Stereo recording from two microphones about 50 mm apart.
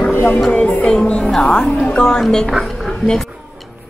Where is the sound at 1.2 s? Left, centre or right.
Centre.